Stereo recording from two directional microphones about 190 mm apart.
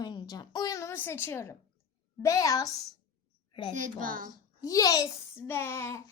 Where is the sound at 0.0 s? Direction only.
20° left (ahead or behind).